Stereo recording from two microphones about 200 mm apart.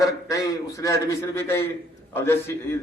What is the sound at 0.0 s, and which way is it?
A man's voice, 15° left (ahead or behind).